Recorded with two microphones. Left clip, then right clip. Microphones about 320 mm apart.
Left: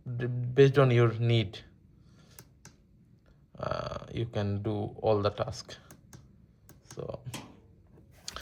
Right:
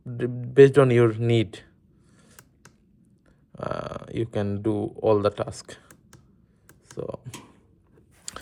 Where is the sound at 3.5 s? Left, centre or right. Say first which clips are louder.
Right 3 dB; right.